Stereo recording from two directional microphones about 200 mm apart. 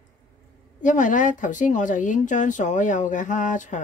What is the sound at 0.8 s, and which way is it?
Speech, 40° left (ahead or behind).